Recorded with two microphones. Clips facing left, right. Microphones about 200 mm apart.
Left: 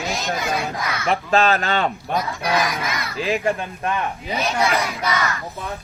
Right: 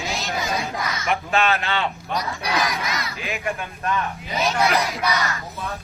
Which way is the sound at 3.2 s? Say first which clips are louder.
Left 7 dB; 30° left (ahead or behind).